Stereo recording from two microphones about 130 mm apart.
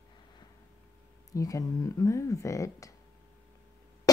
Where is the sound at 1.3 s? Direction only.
25° left (ahead or behind).